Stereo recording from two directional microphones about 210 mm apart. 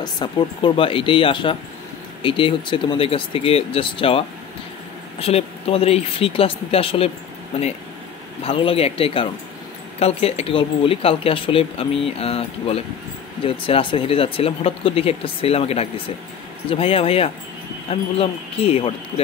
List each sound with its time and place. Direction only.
0.0 s speech: 20° left (ahead or behind)
5.2 s speech: 30° left (ahead or behind)
8.5 s speech: 25° left (ahead or behind)